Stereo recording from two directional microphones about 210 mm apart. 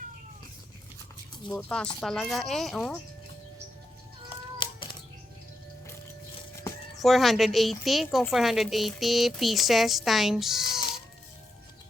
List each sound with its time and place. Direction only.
1.5 s a woman's voice: 5° left (ahead or behind)
4.5 s a sound: 25° left (ahead or behind)
6.9 s a woman's voice: centre (ahead or behind)